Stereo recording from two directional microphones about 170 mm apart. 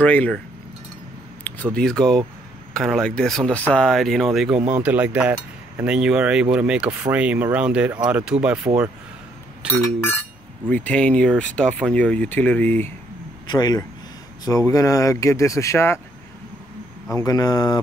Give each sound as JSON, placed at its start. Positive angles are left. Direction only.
{"t": 0.0, "sound": "speech", "side_deg": 10}
{"t": 1.4, "sound": "speech", "side_deg": 5}
{"t": 10.7, "sound": "speech", "side_deg": 10}
{"t": 13.5, "sound": "speech", "side_deg": 25}
{"t": 17.1, "sound": "speech", "side_deg": 20}